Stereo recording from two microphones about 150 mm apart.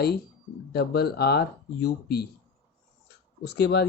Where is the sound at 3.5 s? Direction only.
90° left.